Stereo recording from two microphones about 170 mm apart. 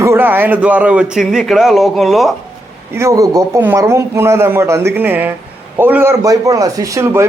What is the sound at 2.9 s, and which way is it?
Speech, 15° right (ahead or behind).